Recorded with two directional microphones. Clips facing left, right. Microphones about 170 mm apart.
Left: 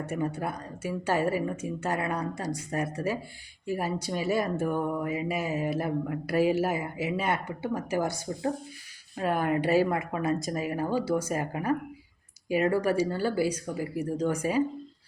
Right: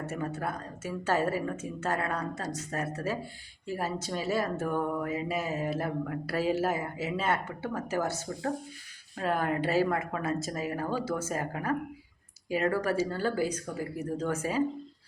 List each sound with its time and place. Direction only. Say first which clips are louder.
0.0 s speech: left 3 dB; 15° left (ahead or behind)
9.5 s speech: left 4 dB; 15° left (ahead or behind)